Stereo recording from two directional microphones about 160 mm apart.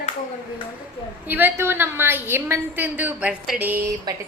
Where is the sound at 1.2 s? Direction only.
10° right (ahead or behind).